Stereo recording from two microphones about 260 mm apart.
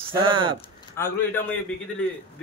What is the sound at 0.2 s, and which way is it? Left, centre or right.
Speech, centre.